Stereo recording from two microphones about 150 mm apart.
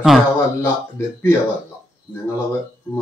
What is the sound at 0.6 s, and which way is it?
Speech, 15° left (ahead or behind).